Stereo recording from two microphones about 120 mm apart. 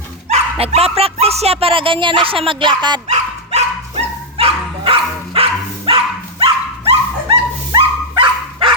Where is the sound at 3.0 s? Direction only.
65° right (ahead or behind).